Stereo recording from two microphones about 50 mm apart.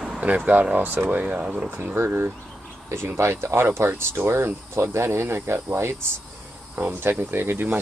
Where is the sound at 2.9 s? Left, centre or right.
Right.